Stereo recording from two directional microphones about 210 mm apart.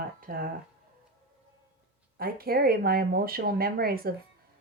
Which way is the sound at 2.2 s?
45° right (ahead or behind).